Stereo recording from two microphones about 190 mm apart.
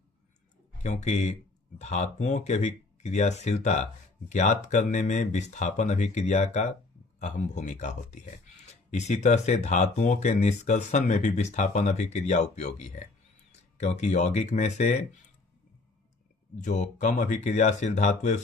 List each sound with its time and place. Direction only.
0.8 s speech: 35° left (ahead or behind)
16.6 s speech: 40° left (ahead or behind)